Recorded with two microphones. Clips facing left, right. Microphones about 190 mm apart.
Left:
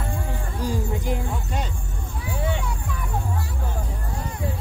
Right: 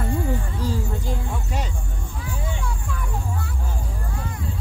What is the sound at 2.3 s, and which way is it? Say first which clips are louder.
Music: left 6 dB; 65° left (ahead or behind).